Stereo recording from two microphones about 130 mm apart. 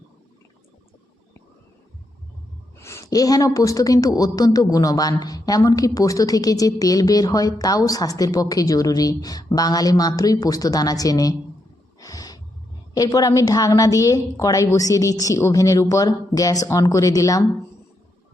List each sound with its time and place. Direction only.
2.7 s a woman's voice: 20° left (ahead or behind)
11.9 s snort: 25° left (ahead or behind)
12.9 s a woman's voice: 30° left (ahead or behind)